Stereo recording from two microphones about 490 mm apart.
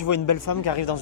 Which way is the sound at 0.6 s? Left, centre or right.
Left.